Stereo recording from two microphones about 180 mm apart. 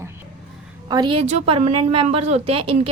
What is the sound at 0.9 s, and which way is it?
Speech, 25° right (ahead or behind).